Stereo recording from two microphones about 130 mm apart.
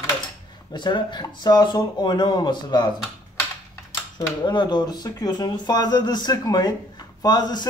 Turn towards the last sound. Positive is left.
turn(degrees=35)  # may be behind; listen again after turning